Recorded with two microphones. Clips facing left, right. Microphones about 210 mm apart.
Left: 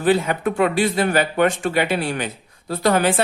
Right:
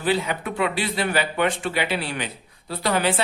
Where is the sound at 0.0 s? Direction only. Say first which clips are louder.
Left 6 dB; 50° left (ahead or behind).